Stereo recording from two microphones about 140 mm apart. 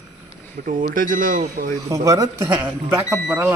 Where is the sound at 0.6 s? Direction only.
80° right.